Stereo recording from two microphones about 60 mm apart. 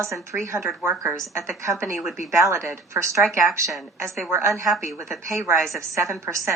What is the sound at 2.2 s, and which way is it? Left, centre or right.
A woman's voice, right.